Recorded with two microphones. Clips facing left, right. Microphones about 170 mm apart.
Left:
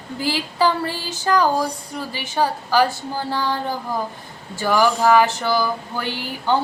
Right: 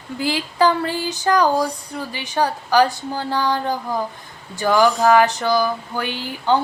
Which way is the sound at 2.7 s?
15° right (ahead or behind).